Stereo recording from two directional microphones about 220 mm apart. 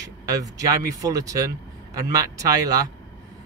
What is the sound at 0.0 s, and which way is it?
Speech, 15° right (ahead or behind).